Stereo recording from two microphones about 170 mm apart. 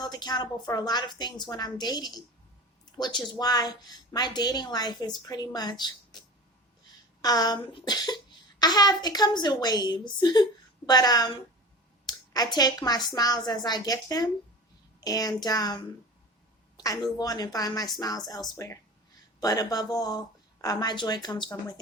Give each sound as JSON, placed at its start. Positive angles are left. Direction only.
{"t": 0.0, "sound": "a woman's voice", "side_deg": 25}
{"t": 16.7, "sound": "a sound", "side_deg": 20}
{"t": 17.2, "sound": "a woman's voice", "side_deg": 25}